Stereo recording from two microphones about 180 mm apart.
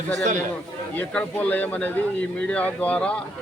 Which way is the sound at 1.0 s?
10° left (ahead or behind).